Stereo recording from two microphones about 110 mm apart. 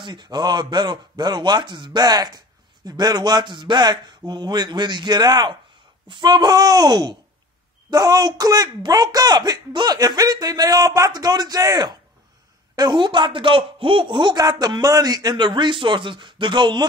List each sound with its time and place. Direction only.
0.0 s a man's voice: 45° right (ahead or behind)